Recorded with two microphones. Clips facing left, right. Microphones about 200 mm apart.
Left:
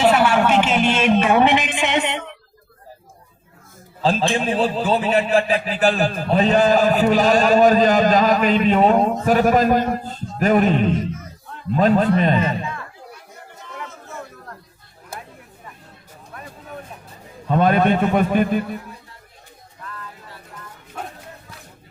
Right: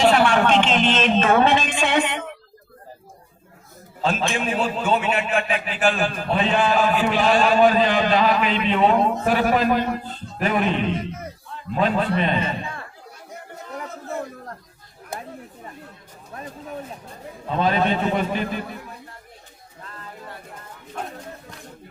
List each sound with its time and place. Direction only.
0.0 s a sound: 5° left (ahead or behind); by 2.1 s 20° left (ahead or behind)
4.0 s a man's voice: 35° left (ahead or behind)
12.5 s speech: 30° right (ahead or behind)
17.5 s a man's voice: 55° left (ahead or behind)